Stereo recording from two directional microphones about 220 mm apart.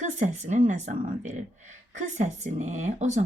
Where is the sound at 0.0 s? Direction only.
35° right (ahead or behind).